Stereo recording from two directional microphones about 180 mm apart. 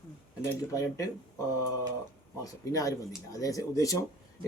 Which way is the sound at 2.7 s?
20° left (ahead or behind).